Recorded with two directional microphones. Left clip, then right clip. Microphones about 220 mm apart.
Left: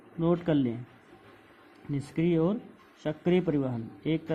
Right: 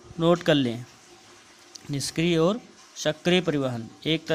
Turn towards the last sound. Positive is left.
turn(degrees=-30)  # may be behind; listen again after turning